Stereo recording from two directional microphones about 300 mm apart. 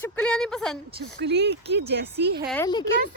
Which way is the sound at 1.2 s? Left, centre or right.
Right.